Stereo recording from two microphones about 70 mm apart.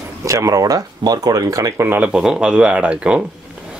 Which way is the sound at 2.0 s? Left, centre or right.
Centre.